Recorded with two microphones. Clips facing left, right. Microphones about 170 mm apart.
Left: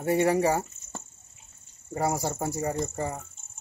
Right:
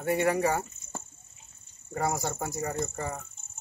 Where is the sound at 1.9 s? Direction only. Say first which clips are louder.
Left 2 dB; 30° left (ahead or behind).